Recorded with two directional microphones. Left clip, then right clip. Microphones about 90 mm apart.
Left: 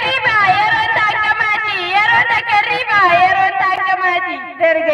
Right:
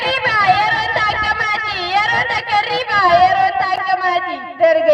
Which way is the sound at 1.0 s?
25° right (ahead or behind).